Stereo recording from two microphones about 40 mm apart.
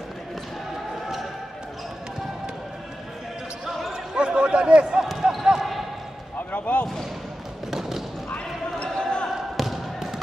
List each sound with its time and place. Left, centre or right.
3.6 s basketball bounce: centre
4.1 s a sound: right
5.3 s basketball bounce: right
5.6 s basketball bounce: centre
6.5 s a sound: left
8.9 s basketball bounce: left
9.6 s basketball bounce: centre